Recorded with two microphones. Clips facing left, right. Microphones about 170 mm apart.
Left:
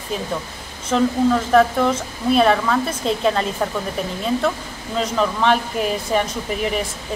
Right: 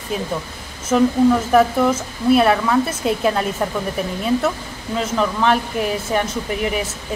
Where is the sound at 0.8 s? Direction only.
5° right (ahead or behind).